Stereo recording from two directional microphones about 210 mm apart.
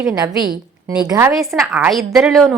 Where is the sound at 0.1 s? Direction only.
15° right (ahead or behind).